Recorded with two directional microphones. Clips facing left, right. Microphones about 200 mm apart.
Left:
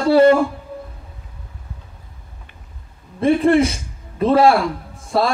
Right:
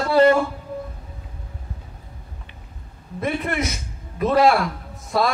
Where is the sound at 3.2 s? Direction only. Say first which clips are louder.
Left 10 dB; 30° left (ahead or behind).